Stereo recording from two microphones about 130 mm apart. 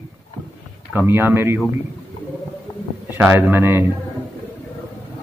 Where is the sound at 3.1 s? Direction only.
15° right (ahead or behind).